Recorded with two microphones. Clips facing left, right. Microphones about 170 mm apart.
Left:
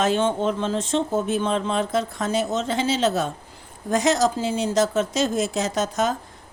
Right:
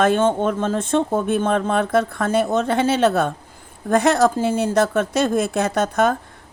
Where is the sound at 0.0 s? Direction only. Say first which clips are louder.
Right 4 dB; 50° right (ahead or behind).